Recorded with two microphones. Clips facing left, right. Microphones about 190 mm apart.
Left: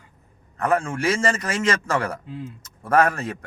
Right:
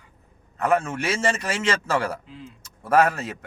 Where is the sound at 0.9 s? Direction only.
25° right (ahead or behind).